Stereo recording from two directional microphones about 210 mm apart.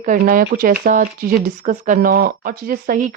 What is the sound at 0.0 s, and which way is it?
A woman's voice, 40° right (ahead or behind).